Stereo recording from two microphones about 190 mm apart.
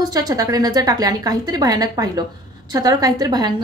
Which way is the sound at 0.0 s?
20° right (ahead or behind).